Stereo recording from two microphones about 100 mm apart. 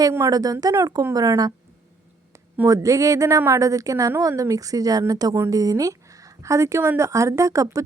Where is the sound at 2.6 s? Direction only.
30° right (ahead or behind).